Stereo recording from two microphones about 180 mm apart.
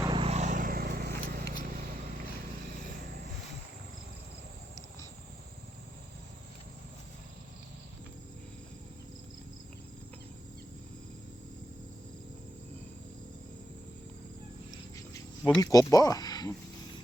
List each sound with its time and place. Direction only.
0.0 s vehicle: 30° right (ahead or behind); by 2.2 s 50° right (ahead or behind)
15.6 s speech: 20° left (ahead or behind)